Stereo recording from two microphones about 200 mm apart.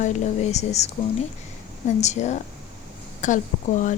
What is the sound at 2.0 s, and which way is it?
Speech, 35° left (ahead or behind).